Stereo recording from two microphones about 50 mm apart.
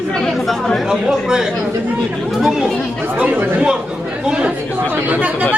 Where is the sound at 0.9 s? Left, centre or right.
Centre.